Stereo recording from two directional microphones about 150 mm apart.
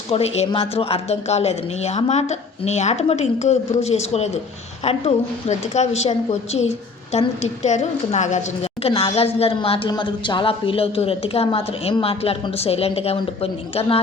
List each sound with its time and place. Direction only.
0.1 s a woman's voice: 45° left (ahead or behind)